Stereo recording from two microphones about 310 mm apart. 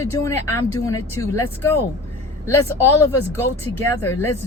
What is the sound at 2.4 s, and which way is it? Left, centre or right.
Speech, centre.